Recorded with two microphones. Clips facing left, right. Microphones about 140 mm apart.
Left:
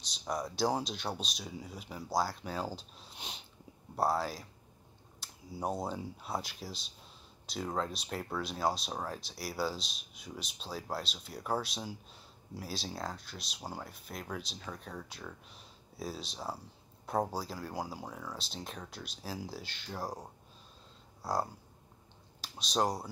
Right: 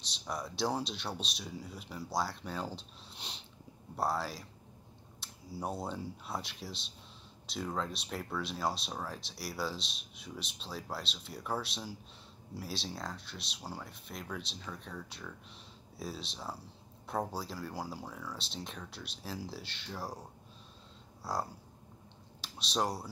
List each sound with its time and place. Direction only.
0.1 s speech: centre (ahead or behind)
5.2 s a sound: centre (ahead or behind)
5.9 s speech: centre (ahead or behind)
18.0 s speech: 20° left (ahead or behind)
18.4 s speech: centre (ahead or behind)
21.2 s speech: centre (ahead or behind)